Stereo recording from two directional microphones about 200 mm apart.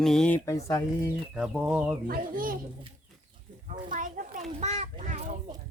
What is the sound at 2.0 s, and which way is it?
Speech, 45° right (ahead or behind).